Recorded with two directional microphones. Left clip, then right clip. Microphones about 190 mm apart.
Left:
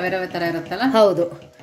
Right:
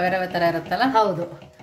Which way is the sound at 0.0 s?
5° right (ahead or behind).